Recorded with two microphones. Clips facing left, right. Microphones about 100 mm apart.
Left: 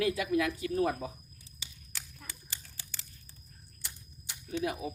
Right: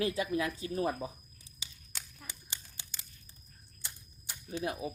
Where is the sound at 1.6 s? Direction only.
20° right (ahead or behind).